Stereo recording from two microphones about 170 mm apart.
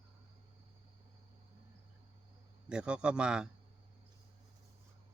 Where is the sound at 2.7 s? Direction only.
5° right (ahead or behind).